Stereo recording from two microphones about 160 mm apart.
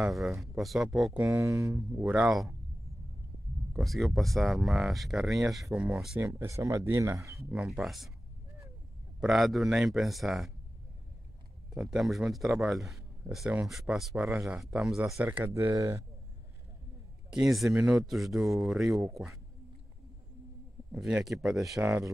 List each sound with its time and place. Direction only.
0.0 s speech: centre (ahead or behind)
1.2 s speech: 20° right (ahead or behind)
2.0 s speech: 5° right (ahead or behind)
3.7 s speech: centre (ahead or behind)
6.2 s speech: 20° right (ahead or behind)
7.5 s speech: 5° right (ahead or behind)
9.2 s speech: centre (ahead or behind)
11.9 s speech: 5° right (ahead or behind); by 16.0 s 20° right (ahead or behind)
17.3 s speech: centre (ahead or behind)
20.9 s speech: 5° right (ahead or behind)